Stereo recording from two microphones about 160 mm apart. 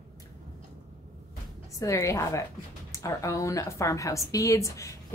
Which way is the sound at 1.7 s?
20° left (ahead or behind).